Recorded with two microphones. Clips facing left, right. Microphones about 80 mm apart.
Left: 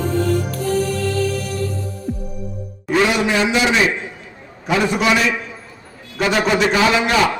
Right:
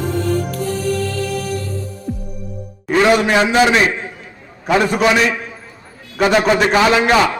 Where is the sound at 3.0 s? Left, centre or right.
Right.